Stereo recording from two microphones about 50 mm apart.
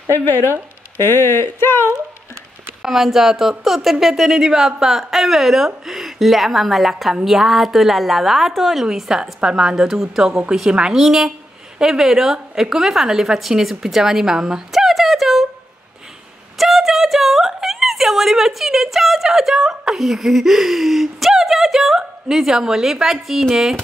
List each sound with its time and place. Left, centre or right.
0.2 s speech: left
2.8 s a woman's voice: centre
16.5 s a sound: centre